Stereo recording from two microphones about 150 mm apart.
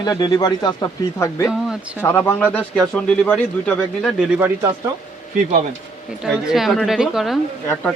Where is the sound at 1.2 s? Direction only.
20° left (ahead or behind); by 4.3 s 5° left (ahead or behind).